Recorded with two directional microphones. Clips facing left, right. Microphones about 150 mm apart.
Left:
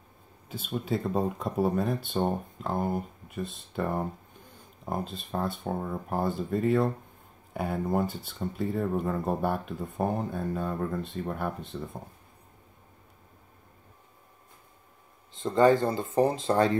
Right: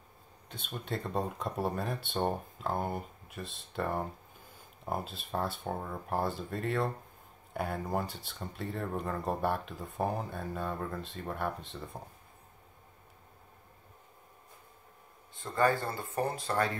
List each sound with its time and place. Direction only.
0.5 s speech: 5° left (ahead or behind)
15.3 s speech: 20° left (ahead or behind)